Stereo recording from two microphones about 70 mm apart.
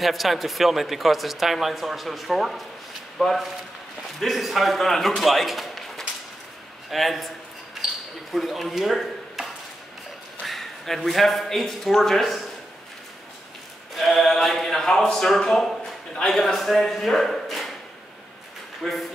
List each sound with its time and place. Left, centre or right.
0.0 s a man's voice: centre
8.3 s a man's voice: centre
13.9 s speech: centre
18.8 s speech: centre